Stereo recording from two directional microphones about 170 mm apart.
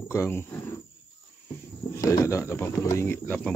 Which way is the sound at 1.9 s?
20° left (ahead or behind).